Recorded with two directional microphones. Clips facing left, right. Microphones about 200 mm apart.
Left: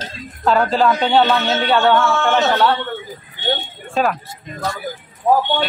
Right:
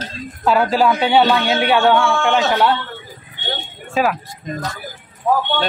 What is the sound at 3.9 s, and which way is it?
Speech, centre (ahead or behind).